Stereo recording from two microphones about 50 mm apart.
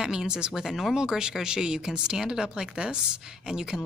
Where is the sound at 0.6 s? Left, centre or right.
Centre.